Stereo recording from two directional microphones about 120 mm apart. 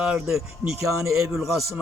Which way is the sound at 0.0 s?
5° right (ahead or behind).